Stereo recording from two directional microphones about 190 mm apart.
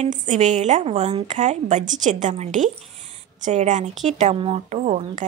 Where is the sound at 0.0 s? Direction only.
40° right (ahead or behind).